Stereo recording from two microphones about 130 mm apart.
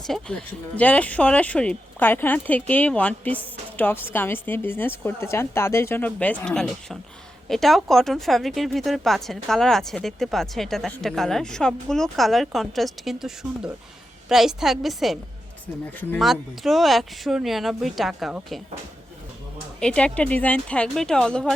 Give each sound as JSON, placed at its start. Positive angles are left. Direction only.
{"t": 0.0, "sound": "speech", "side_deg": 5}
{"t": 19.8, "sound": "speech", "side_deg": 5}